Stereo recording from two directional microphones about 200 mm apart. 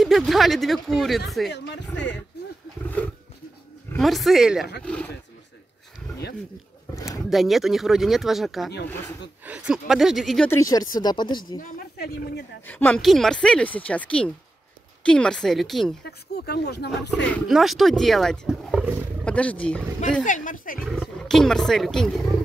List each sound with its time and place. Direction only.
0.0 s speech: centre (ahead or behind)
1.5 s speech: 60° left (ahead or behind)
3.0 s speech: 10° left (ahead or behind)
7.0 s a sound: 15° left (ahead or behind)
7.2 s speech: centre (ahead or behind)
10.5 s speech: 15° left (ahead or behind)
12.0 s speech: 50° left (ahead or behind)
12.6 s speech: 10° left (ahead or behind)
16.0 s speech: 55° left (ahead or behind)
17.3 s speech: centre (ahead or behind)
19.2 s speech: 5° left (ahead or behind)
20.2 s speech: 40° left (ahead or behind)
20.8 s speech: centre (ahead or behind)